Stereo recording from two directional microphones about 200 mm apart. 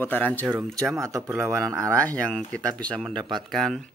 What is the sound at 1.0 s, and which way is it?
Speech, 15° right (ahead or behind).